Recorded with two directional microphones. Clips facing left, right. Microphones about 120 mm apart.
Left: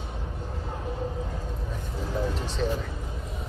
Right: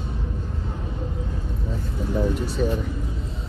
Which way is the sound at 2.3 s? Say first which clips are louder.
Right 5 dB; 10° right (ahead or behind).